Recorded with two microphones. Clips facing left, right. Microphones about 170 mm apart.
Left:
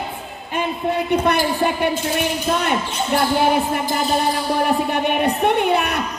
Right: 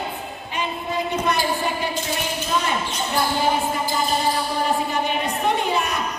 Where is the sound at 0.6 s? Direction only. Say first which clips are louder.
Left 4 dB; 60° left (ahead or behind).